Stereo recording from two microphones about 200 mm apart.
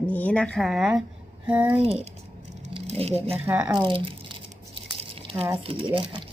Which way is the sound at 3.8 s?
25° right (ahead or behind).